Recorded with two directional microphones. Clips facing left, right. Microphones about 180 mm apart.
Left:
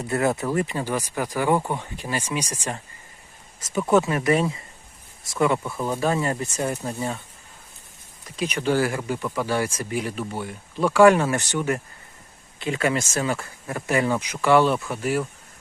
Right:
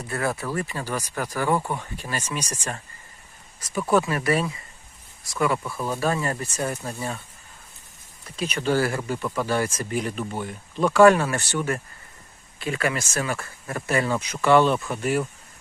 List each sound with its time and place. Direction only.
0.0 s speech: 20° left (ahead or behind)
3.8 s speech: 20° left (ahead or behind)
8.4 s speech: 15° left (ahead or behind)